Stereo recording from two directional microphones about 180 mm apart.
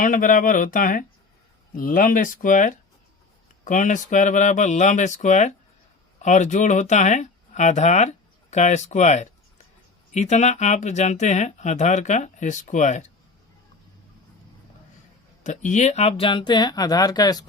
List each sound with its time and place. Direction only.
0.0 s speech: 50° left (ahead or behind)
15.4 s speech: 45° left (ahead or behind); by 17.4 s 20° left (ahead or behind)